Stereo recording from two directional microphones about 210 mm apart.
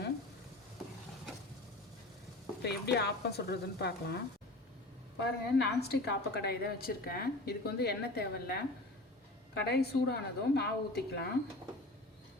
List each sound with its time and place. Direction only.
2.6 s a woman's voice: 50° left (ahead or behind)
9.6 s a woman's voice: 50° left (ahead or behind)